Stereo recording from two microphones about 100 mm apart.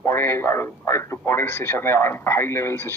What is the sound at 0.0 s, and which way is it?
A man's voice, 25° left (ahead or behind).